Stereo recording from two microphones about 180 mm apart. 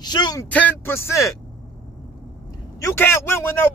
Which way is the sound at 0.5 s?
10° left (ahead or behind).